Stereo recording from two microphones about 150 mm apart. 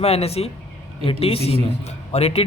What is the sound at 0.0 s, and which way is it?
A man's voice, 45° left (ahead or behind).